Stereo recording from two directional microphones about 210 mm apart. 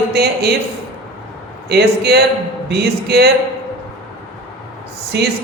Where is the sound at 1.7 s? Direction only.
50° right (ahead or behind).